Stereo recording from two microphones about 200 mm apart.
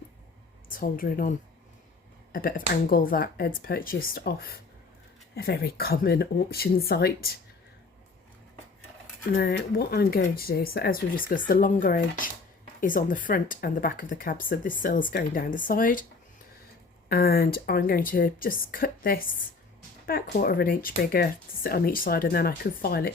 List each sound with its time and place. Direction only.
0.7 s speech: 45° left (ahead or behind)
2.3 s speech: 45° left (ahead or behind)
9.3 s speech: 50° left (ahead or behind)
17.1 s speech: 50° left (ahead or behind)